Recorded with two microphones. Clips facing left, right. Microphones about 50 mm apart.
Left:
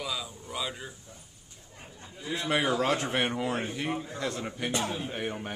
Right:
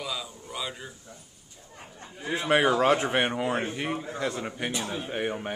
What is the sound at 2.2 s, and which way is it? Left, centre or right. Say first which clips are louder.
A man's voice: right 5 dB; right.